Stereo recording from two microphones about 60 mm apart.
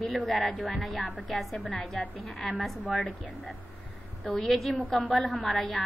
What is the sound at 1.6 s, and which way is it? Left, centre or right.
Speech, left.